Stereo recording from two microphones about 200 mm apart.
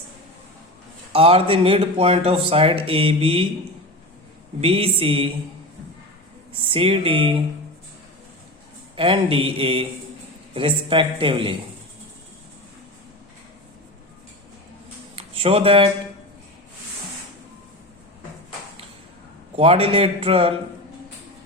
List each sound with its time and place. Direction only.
1.1 s speech: 30° right (ahead or behind)
4.6 s speech: 30° right (ahead or behind)
6.5 s speech: 25° right (ahead or behind)
9.0 s speech: 25° right (ahead or behind)
15.1 s a sound: 30° right (ahead or behind)
19.5 s speech: 30° right (ahead or behind)